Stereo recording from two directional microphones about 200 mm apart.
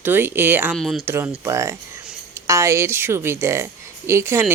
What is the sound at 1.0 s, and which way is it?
Speech, 10° right (ahead or behind).